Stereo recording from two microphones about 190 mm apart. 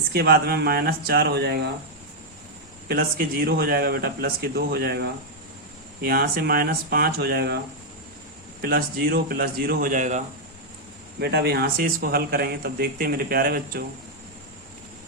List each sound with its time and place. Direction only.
0.1 s speech: 55° right (ahead or behind)
2.9 s speech: 50° right (ahead or behind)
8.6 s speech: 50° right (ahead or behind)
11.2 s speech: 60° right (ahead or behind)